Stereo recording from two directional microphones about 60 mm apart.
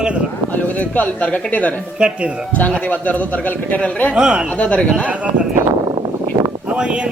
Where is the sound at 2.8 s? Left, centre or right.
Left.